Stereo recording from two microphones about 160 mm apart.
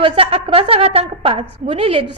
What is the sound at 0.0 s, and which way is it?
A woman's voice, 35° right (ahead or behind).